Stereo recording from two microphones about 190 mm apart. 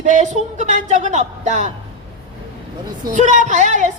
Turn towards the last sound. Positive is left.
turn(degrees=-40)  # may be behind; listen again after turning